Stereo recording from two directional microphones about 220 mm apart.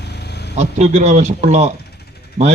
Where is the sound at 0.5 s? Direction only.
30° right (ahead or behind).